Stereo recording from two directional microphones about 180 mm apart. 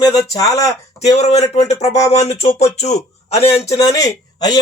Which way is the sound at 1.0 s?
35° left (ahead or behind).